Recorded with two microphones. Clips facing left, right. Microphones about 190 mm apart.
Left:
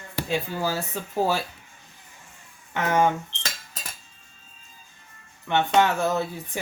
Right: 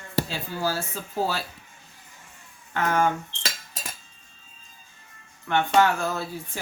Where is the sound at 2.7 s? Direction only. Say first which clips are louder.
Left 1 dB; 20° left (ahead or behind).